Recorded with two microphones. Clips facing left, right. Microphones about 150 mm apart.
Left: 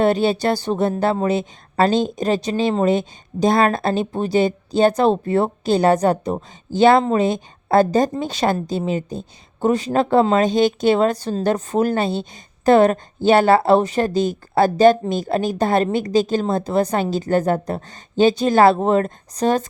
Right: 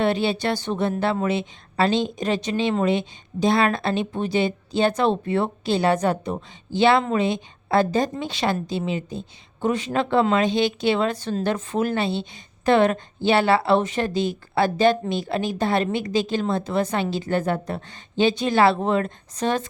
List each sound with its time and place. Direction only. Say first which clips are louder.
0.0 s a woman's voice: left 5 dB; 40° left (ahead or behind)